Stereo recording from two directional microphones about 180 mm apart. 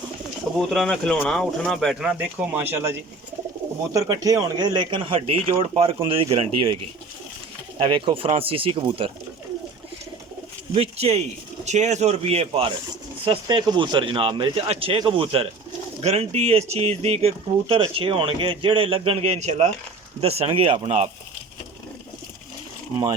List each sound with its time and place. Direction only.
0.7 s speech: 5° left (ahead or behind); by 2.9 s 10° right (ahead or behind)
3.9 s speech: 20° right (ahead or behind)
7.8 s speech: 30° right (ahead or behind)
10.8 s speech: 35° right (ahead or behind)